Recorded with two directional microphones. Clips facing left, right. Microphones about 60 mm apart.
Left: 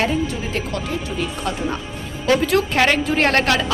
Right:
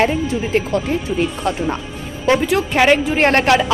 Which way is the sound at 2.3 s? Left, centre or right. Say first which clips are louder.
Even; centre.